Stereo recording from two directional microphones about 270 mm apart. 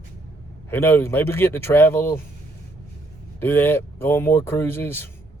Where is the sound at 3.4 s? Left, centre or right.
Centre.